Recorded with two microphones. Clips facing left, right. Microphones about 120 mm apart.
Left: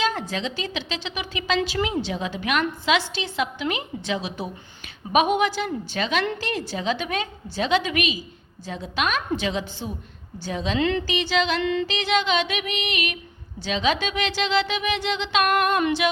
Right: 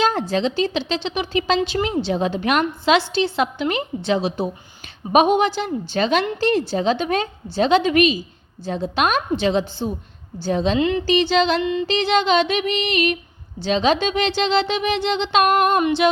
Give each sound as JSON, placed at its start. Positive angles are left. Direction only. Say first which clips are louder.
{"t": 0.0, "sound": "a woman's voice", "louder": "right 6 dB", "side_deg": -30}
{"t": 10.8, "sound": "speech", "louder": "right 3 dB", "side_deg": -15}
{"t": 11.0, "sound": "a woman's voice", "louder": "right 7 dB", "side_deg": -30}
{"t": 11.6, "sound": "speech", "louder": "right 2 dB", "side_deg": -15}
{"t": 11.9, "sound": "a woman's voice", "louder": "right 5 dB", "side_deg": -30}
{"t": 15.8, "sound": "music", "louder": "right 4 dB", "side_deg": -25}